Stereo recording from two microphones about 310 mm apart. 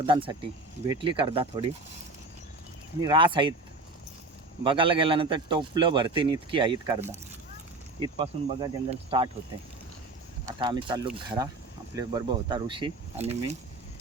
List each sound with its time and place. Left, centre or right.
0.0 s speech: centre
3.0 s speech: centre
4.6 s speech: centre
8.2 s speech: centre
10.4 s speech: centre